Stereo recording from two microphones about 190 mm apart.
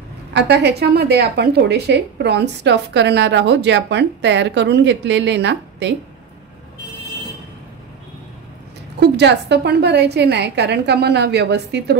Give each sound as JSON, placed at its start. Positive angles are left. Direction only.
{"t": 0.3, "sound": "a woman's voice", "side_deg": -60}
{"t": 9.1, "sound": "a woman's voice", "side_deg": -60}